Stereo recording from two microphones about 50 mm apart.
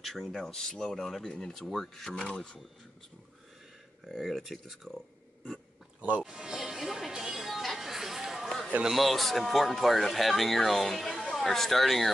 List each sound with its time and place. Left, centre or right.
0.0 s speech: centre
2.1 s speech: centre
4.0 s speech: centre
6.2 s music: centre
8.8 s speech: centre